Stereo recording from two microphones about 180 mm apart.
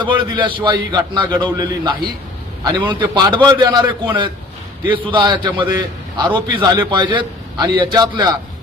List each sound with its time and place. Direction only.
0.0 s a man's voice: 25° right (ahead or behind)